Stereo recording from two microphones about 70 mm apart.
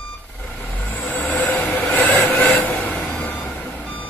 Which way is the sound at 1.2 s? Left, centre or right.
Left.